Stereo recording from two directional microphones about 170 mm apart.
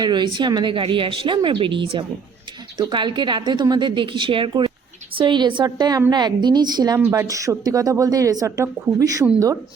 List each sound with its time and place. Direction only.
0.0 s speech: 25° right (ahead or behind)